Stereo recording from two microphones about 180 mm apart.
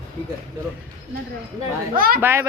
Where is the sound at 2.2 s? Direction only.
15° right (ahead or behind).